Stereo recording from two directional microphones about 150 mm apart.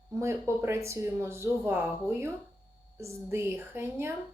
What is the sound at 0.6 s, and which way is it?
A woman's voice, 20° right (ahead or behind).